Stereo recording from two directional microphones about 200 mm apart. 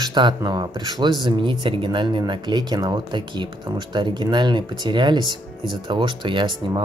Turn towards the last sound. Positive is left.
turn(degrees=-25)  # may be behind; listen again after turning